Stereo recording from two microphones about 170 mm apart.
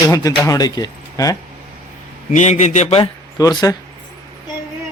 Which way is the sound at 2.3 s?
45° left (ahead or behind).